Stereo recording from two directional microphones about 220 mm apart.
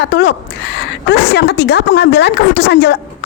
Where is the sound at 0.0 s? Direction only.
50° left (ahead or behind).